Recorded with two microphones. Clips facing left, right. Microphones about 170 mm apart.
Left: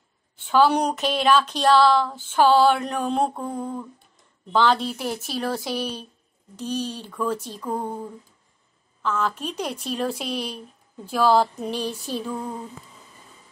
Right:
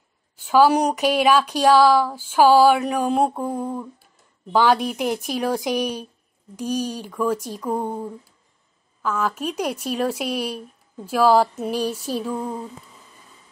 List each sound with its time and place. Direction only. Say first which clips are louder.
0.4 s speech: right 3 dB; 5° right (ahead or behind)